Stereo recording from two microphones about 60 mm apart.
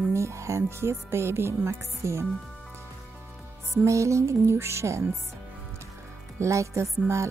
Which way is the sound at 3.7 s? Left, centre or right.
Right.